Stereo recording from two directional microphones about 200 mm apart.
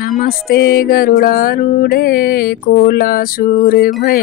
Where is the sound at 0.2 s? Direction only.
50° left (ahead or behind).